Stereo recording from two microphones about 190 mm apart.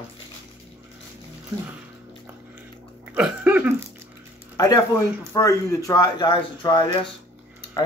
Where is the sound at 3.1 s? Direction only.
5° right (ahead or behind).